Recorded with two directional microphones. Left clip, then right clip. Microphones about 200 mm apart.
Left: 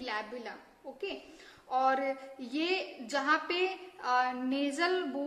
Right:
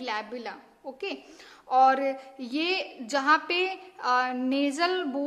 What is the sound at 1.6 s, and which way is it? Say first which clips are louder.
A woman's voice: right 8 dB; 35° right (ahead or behind).